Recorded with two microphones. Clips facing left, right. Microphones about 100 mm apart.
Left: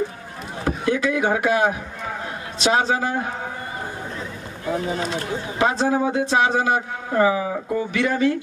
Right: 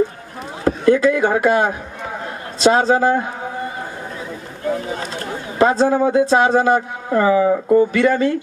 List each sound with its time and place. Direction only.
0.7 s speech: 40° right (ahead or behind)
4.9 s speech: 40° right (ahead or behind)